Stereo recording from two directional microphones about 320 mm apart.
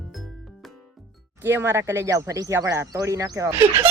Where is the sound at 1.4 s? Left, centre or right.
Centre.